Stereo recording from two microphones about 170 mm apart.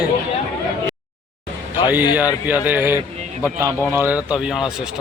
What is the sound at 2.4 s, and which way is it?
Speech, 10° right (ahead or behind).